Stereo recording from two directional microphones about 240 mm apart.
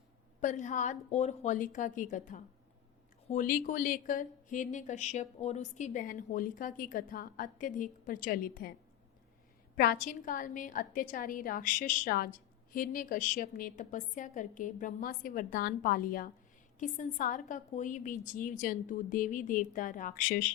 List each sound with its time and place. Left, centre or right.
0.4 s a woman's voice: left
9.7 s a woman's voice: left